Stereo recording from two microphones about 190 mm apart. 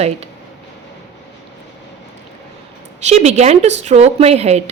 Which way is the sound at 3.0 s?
35° right (ahead or behind).